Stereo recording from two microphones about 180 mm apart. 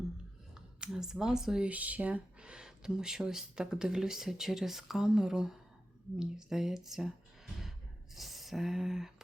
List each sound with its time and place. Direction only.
0.8 s speech: 5° right (ahead or behind)